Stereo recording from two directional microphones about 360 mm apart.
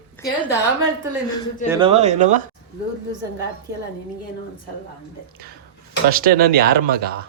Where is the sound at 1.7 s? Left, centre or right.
Centre.